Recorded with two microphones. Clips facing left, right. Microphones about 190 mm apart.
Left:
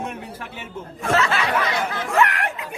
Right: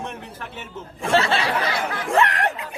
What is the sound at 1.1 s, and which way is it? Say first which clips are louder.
Speech: even; 30° right (ahead or behind).